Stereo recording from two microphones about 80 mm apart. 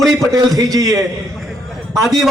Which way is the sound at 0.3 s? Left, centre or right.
Right.